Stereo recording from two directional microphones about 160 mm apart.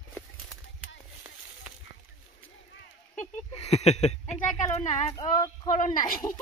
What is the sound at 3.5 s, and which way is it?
Speech, 40° left (ahead or behind).